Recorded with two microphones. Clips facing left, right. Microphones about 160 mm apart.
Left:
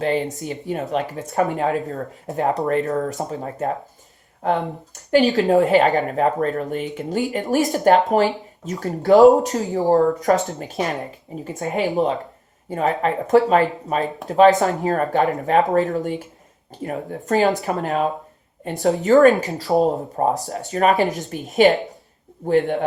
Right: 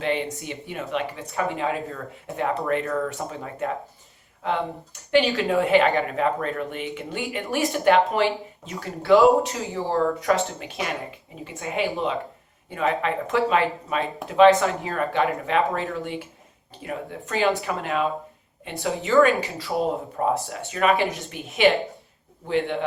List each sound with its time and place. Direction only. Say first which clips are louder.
0.0 s speech: left 4 dB; 40° left (ahead or behind)
5.1 s speech: left 5 dB; 40° left (ahead or behind)